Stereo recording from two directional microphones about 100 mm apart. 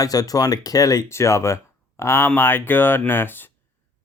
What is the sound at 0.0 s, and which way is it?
Speech, 40° left (ahead or behind).